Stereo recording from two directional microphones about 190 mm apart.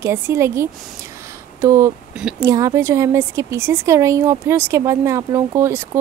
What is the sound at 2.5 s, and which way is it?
A woman's voice, 15° right (ahead or behind).